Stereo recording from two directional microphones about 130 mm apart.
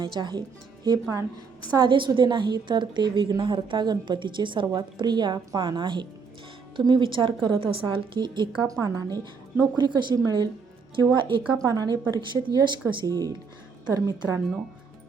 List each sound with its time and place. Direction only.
0.0 s a woman's voice: 35° right (ahead or behind)
1.7 s a woman's voice: 35° right (ahead or behind)
11.5 s a woman's voice: 25° right (ahead or behind)